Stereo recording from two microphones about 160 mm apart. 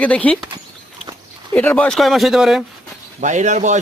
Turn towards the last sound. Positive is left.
turn(degrees=-50)  # may be behind; listen again after turning